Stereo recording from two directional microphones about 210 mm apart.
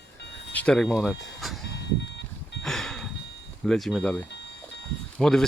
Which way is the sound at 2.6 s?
Centre (ahead or behind).